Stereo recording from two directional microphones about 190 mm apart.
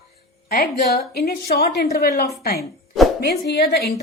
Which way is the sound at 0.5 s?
55° left (ahead or behind).